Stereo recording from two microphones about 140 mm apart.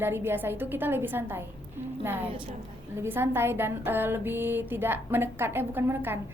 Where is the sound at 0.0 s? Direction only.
15° right (ahead or behind).